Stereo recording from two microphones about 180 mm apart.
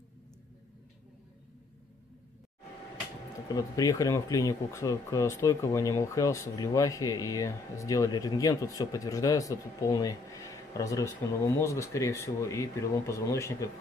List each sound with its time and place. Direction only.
3.4 s speech: 20° left (ahead or behind)